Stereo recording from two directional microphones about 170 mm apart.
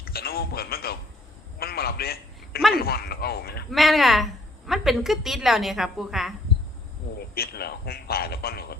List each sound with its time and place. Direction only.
0.0 s a man's voice: 65° left (ahead or behind)
1.5 s a sound: 65° left (ahead or behind)
2.7 s a man's voice: 65° left (ahead or behind)
3.7 s a woman's voice: centre (ahead or behind)
7.2 s a man's voice: 65° left (ahead or behind)